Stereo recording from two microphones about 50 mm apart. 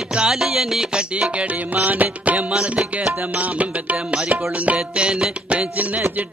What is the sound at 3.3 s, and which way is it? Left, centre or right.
Music, right.